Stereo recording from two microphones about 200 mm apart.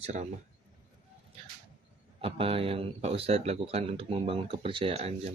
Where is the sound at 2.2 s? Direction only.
30° right (ahead or behind).